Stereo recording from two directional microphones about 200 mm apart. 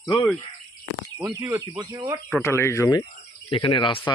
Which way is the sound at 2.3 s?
15° left (ahead or behind).